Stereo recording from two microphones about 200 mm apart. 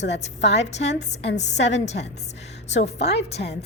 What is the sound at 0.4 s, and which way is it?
Speech, 60° left (ahead or behind).